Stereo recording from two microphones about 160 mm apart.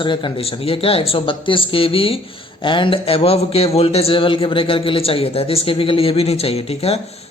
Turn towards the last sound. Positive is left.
turn(degrees=40)  # may be behind; listen again after turning